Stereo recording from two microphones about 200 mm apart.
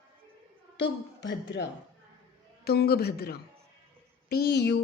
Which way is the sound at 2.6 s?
50° left (ahead or behind).